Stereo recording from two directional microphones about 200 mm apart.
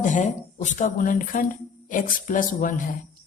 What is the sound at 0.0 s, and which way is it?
A woman's voice, 40° left (ahead or behind).